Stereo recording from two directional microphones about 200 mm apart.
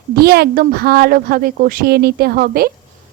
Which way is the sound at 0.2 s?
50° right (ahead or behind).